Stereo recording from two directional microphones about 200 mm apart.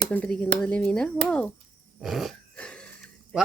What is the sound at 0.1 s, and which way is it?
A woman's voice, 5° left (ahead or behind).